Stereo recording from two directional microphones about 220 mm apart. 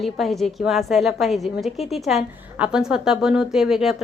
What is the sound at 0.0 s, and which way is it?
A woman's voice, centre (ahead or behind).